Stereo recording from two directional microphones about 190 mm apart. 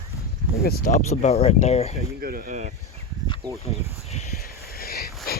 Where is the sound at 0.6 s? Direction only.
55° left (ahead or behind).